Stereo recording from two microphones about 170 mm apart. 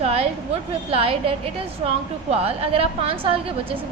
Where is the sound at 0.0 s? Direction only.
35° right (ahead or behind).